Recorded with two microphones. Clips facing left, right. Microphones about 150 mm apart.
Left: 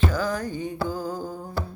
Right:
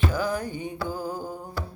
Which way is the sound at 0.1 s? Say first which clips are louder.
Left 1 dB; 15° right (ahead or behind).